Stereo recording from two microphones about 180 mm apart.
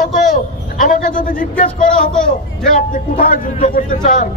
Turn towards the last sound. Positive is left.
turn(degrees=45)  # may be behind; listen again after turning